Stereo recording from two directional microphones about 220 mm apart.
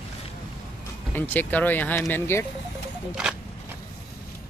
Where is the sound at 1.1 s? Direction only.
10° left (ahead or behind).